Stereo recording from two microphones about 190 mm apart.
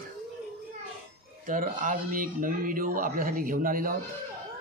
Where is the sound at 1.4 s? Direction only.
45° right (ahead or behind).